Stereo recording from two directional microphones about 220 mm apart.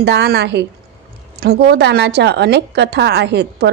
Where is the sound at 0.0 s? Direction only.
50° right (ahead or behind).